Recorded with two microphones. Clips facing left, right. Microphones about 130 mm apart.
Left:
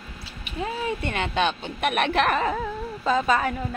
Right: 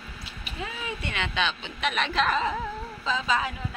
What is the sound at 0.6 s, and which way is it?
A woman's voice, 40° left (ahead or behind).